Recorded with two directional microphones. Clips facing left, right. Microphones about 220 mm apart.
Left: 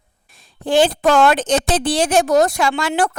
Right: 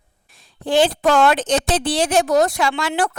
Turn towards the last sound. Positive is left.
turn(degrees=45)  # may be behind; listen again after turning